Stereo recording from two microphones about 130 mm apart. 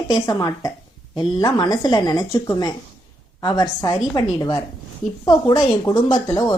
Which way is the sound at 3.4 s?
30° left (ahead or behind).